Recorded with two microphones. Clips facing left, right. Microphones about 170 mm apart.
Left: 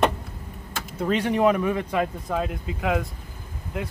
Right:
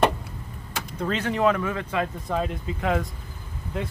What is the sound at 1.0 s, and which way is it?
Speech, 15° left (ahead or behind).